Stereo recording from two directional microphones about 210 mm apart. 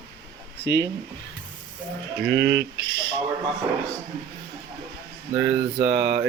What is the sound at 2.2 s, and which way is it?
Speech, 50° right (ahead or behind).